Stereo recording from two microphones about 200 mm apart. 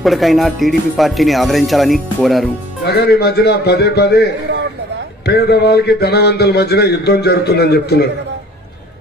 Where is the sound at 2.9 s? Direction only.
55° left (ahead or behind).